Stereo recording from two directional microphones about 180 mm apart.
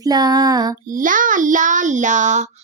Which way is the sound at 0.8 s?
45° right (ahead or behind).